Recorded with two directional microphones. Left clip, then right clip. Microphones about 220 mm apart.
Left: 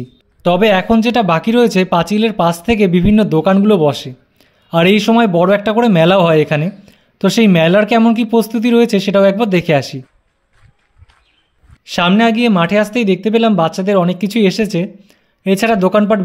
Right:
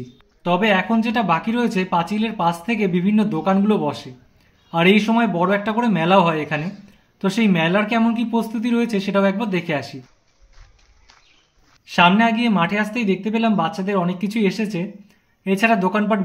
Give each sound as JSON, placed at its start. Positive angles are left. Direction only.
{"t": 0.4, "sound": "speech", "side_deg": 50}
{"t": 11.8, "sound": "speech", "side_deg": 50}